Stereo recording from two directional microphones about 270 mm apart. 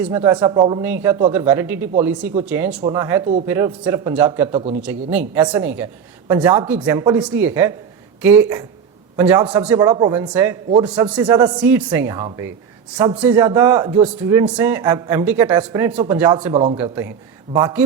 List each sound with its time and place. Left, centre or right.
0.0 s a man's voice: centre
4.5 s a man's voice: right
5.1 s a man's voice: centre